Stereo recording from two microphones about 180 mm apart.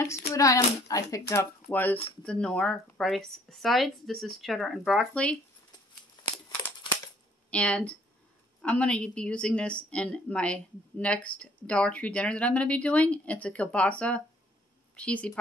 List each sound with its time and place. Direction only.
0.3 s a woman's voice: 15° left (ahead or behind)
6.2 s crumpling: 25° left (ahead or behind)
7.5 s speech: 5° left (ahead or behind)